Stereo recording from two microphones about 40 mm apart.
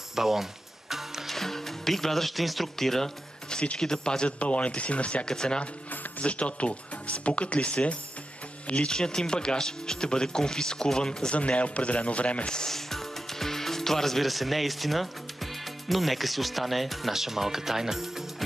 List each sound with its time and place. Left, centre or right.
0.1 s music: centre
1.3 s speech: centre
4.4 s speech: left
5.2 s speech: centre
5.9 s speech: left
8.8 s speech: centre
12.5 s speech: centre